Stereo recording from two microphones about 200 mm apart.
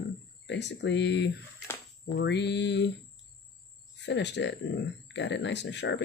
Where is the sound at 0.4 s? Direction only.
60° left (ahead or behind).